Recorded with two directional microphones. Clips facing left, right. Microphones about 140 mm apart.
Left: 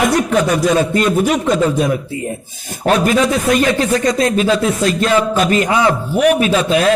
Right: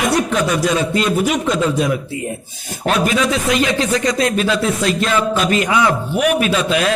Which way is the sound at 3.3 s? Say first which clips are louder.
Left 3 dB; 50° left (ahead or behind).